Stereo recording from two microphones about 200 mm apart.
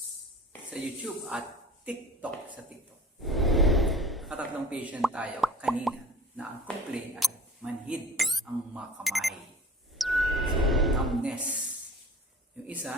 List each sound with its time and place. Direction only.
0.7 s speech: 5° right (ahead or behind)
3.2 s a sound: centre (ahead or behind)
6.9 s speech: centre (ahead or behind)
10.0 s music: centre (ahead or behind)
12.6 s speech: 5° right (ahead or behind)